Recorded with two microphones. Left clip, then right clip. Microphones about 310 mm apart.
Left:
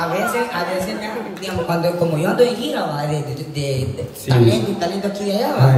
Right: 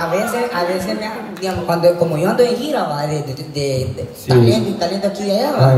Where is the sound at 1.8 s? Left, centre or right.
Right.